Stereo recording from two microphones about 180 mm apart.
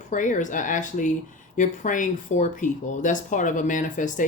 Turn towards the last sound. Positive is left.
turn(degrees=45)  # may be behind; listen again after turning